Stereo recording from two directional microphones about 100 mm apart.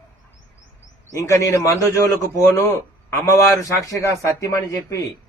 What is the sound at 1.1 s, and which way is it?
A man's voice, 35° left (ahead or behind).